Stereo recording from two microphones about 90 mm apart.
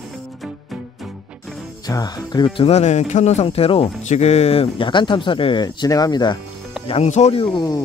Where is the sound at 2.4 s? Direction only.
80° left.